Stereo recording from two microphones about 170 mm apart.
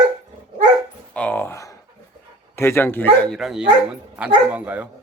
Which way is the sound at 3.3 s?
Centre (ahead or behind).